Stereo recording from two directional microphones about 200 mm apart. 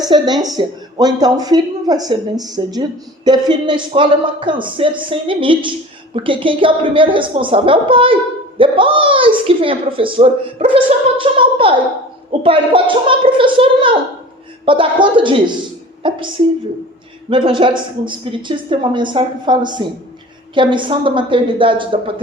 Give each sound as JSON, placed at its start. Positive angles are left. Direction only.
{"t": 0.1, "sound": "speech", "side_deg": -20}
{"t": 17.2, "sound": "speech", "side_deg": -25}